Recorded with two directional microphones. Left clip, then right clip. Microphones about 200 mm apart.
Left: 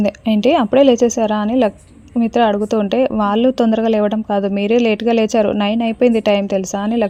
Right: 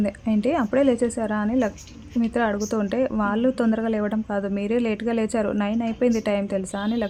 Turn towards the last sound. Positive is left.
turn(degrees=20)  # may be behind; listen again after turning